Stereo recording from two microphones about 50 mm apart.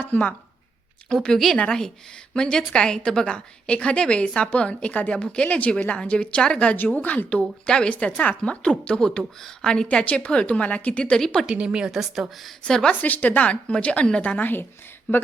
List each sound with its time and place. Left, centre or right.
0.1 s a woman's voice: left
1.1 s a woman's voice: centre
1.5 s a woman's voice: left
3.3 s a woman's voice: left
11.1 s a woman's voice: centre
11.4 s a woman's voice: centre
11.9 s speech: centre
12.6 s a woman's voice: centre
12.9 s a woman's voice: left